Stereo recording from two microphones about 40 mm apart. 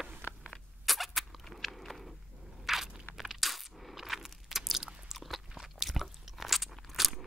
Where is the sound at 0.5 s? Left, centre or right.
Centre.